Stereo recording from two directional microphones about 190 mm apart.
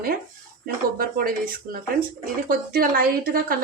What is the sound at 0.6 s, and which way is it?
Speech, 50° right (ahead or behind).